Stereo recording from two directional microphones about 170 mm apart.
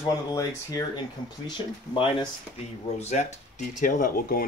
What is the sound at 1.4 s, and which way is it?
Speech, 25° left (ahead or behind).